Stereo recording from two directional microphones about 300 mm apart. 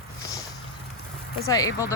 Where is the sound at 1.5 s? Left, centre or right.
Centre.